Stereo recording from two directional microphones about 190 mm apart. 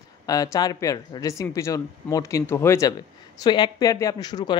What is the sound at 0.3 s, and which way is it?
Speech, 20° left (ahead or behind).